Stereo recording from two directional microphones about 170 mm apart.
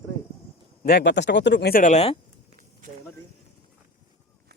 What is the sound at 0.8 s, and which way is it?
Speech, 80° left.